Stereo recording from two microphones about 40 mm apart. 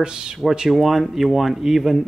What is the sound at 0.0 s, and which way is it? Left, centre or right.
Speech, centre.